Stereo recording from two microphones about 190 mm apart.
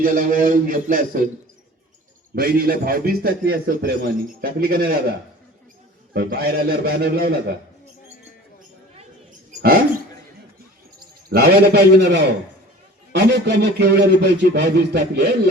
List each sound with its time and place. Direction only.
0.0 s a man's voice: 50° right (ahead or behind)
2.3 s a man's voice: 50° right (ahead or behind)
6.1 s speech: 55° right (ahead or behind)
9.6 s speech: 50° right (ahead or behind)
11.3 s speech: 55° right (ahead or behind)